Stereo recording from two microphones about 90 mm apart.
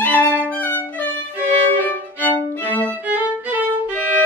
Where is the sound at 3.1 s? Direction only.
15° right (ahead or behind).